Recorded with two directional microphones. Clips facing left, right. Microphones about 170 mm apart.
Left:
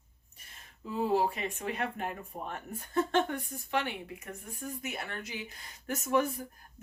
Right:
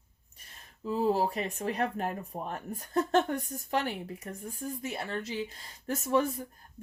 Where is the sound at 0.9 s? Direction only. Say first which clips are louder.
Right 1 dB; 40° right (ahead or behind).